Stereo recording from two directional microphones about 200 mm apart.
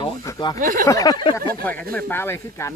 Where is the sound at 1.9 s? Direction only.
10° left (ahead or behind).